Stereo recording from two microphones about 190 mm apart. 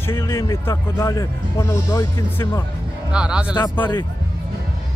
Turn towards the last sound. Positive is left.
turn(degrees=10)  # may be behind; listen again after turning